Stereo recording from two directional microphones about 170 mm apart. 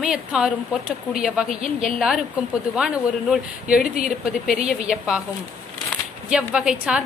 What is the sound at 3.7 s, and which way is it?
Speech, 55° left (ahead or behind).